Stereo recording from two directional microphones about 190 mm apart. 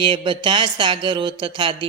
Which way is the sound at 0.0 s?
25° right (ahead or behind).